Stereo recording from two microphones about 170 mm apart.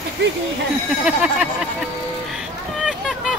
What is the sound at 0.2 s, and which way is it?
Speech, 80° right.